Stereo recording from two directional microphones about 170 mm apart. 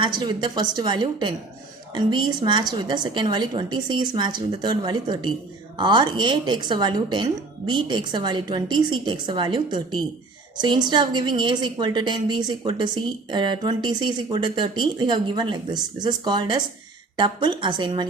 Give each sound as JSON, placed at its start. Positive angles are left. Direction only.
{"t": 0.0, "sound": "speech", "side_deg": -25}